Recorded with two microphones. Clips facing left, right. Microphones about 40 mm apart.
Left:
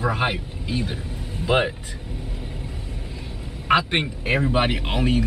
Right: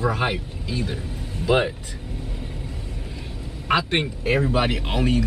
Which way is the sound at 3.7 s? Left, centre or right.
Centre.